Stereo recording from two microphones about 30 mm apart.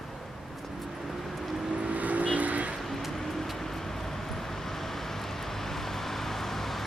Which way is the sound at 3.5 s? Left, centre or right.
Centre.